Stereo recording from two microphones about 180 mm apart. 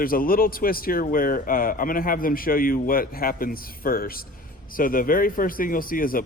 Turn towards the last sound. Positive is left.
turn(degrees=50)  # may be behind; listen again after turning